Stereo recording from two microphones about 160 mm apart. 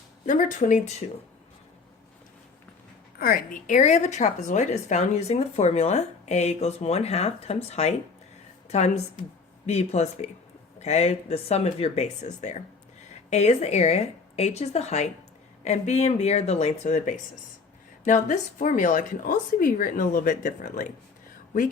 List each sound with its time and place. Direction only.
0.3 s a woman's voice: 50° left (ahead or behind)
3.2 s a woman's voice: 70° left (ahead or behind); by 7.9 s 45° left (ahead or behind)
9.6 s a woman's voice: 45° left (ahead or behind)